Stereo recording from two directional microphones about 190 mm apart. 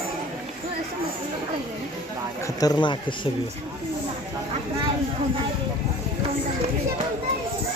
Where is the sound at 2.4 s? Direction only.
20° left (ahead or behind).